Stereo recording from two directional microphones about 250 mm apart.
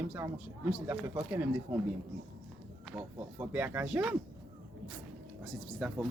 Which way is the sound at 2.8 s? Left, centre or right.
Centre.